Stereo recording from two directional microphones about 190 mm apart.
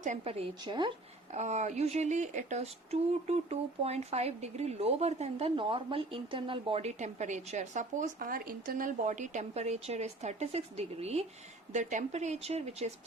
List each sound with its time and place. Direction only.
0.0 s a woman's voice: 35° right (ahead or behind)
1.3 s speech: 35° right (ahead or behind)